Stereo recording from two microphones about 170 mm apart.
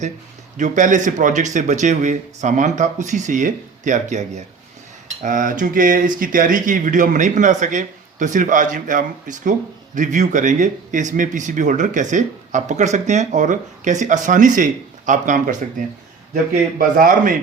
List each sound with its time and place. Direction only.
0.5 s speech: 45° right (ahead or behind)